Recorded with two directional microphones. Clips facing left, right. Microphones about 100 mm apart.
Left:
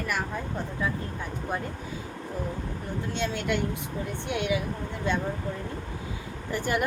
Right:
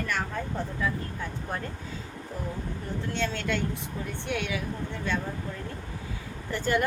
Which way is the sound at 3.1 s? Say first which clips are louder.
Left 1 dB; 15° left (ahead or behind).